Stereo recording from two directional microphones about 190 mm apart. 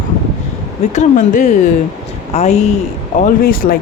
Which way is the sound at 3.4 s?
50° left (ahead or behind).